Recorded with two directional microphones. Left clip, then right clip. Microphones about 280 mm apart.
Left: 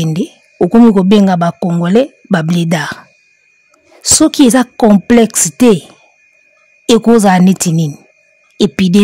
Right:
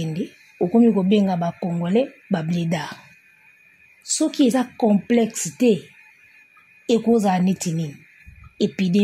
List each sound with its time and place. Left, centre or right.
0.0 s speech: left
4.0 s speech: left
6.9 s speech: left